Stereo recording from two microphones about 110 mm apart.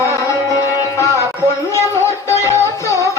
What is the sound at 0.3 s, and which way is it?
Music, 30° left (ahead or behind).